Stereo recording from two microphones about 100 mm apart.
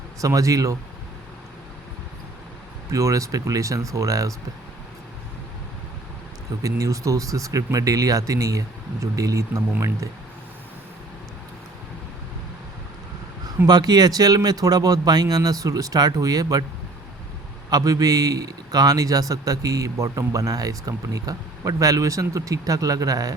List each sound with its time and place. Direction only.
0.2 s speech: 35° right (ahead or behind)
2.9 s speech: 35° right (ahead or behind)
6.6 s speech: 35° right (ahead or behind)
13.7 s speech: 40° right (ahead or behind)
17.7 s speech: 40° right (ahead or behind)